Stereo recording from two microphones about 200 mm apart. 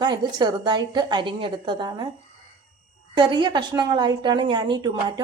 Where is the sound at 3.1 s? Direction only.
25° right (ahead or behind).